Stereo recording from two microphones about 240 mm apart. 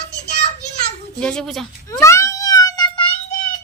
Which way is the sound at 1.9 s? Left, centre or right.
Centre.